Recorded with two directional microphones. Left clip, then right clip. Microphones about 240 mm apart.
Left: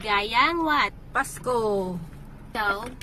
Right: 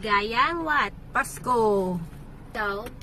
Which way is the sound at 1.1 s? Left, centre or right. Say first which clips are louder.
Right 4 dB; centre.